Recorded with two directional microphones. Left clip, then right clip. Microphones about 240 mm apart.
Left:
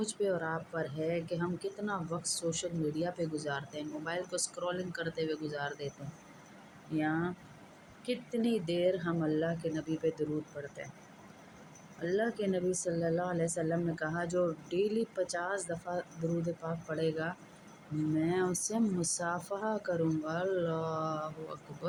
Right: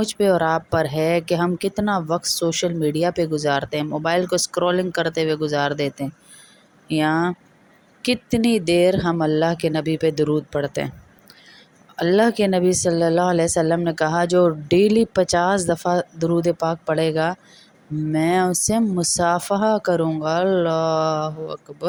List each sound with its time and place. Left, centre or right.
0.0 s speech: right
6.9 s speech: right
11.9 s speech: right